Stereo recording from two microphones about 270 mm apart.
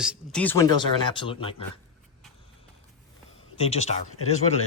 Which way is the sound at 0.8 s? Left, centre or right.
Centre.